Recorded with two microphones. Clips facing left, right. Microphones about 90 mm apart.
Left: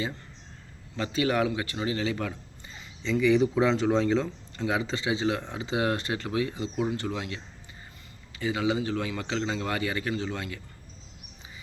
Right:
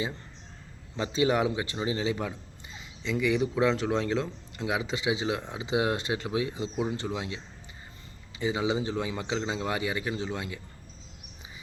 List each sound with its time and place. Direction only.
0.9 s a man's voice: 20° right (ahead or behind)